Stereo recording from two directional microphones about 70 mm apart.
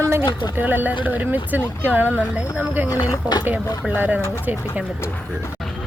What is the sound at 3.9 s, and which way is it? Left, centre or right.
Speech, right.